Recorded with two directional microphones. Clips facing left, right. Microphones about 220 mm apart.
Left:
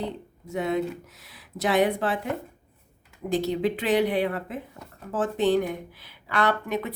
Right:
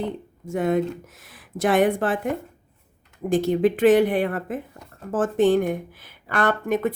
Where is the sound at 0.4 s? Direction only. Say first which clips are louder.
Right 4 dB; 50° right (ahead or behind).